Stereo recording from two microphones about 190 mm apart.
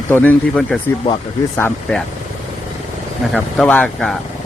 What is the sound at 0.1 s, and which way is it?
A man's voice, 10° left (ahead or behind).